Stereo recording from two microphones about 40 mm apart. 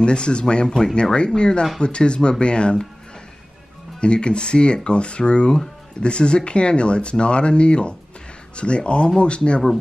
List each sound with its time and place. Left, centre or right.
0.0 s speech: left
1.1 s speech: left
4.0 s speech: left